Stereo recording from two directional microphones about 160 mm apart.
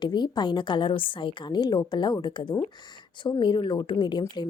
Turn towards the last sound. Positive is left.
turn(degrees=30)  # may be behind; listen again after turning